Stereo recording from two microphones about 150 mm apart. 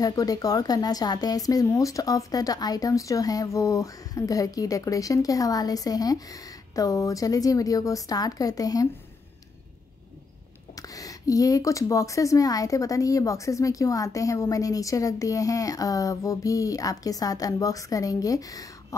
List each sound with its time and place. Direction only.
0.0 s speech: 25° left (ahead or behind)
10.8 s speech: 25° left (ahead or behind)